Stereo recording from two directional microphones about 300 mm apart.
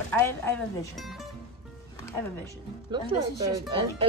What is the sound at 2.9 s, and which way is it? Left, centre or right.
A woman's voice, centre.